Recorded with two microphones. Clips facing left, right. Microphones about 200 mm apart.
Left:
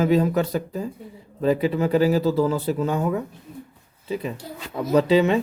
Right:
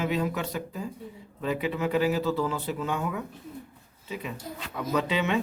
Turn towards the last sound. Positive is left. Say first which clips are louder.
# left 9 dB
turn(degrees=35)  # may be behind; listen again after turning